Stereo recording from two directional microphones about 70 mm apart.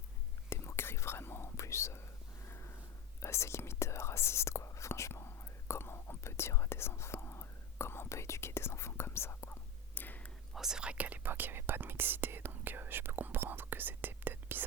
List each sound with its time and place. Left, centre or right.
0.5 s whispering: left
3.2 s whispering: left
10.5 s whispering: centre; by 14.6 s right